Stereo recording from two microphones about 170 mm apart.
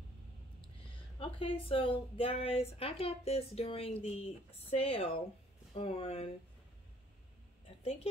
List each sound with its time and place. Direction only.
1.2 s speech: 30° left (ahead or behind)